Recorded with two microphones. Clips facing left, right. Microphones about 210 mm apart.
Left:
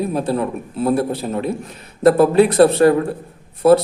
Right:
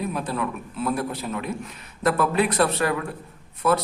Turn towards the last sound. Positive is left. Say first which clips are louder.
# left 10 dB
turn(degrees=30)  # may be behind; listen again after turning